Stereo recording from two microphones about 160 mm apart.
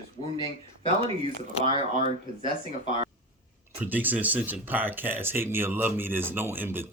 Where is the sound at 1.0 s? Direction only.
30° right (ahead or behind).